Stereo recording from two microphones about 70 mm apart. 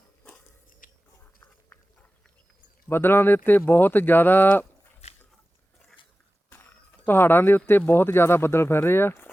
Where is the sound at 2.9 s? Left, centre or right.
Left.